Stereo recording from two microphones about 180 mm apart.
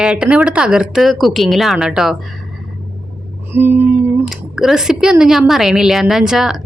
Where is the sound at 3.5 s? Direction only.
10° right (ahead or behind).